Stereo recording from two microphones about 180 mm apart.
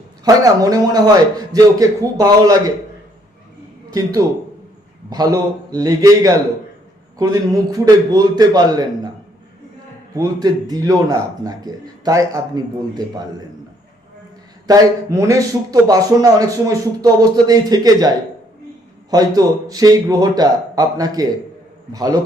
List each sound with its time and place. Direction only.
0.3 s speech: 20° right (ahead or behind)
5.0 s speech: 20° right (ahead or behind)
10.2 s speech: 20° right (ahead or behind)
14.7 s speech: 15° right (ahead or behind)
19.1 s speech: 20° right (ahead or behind)